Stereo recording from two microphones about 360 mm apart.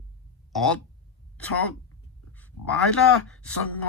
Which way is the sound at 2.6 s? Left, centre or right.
Left.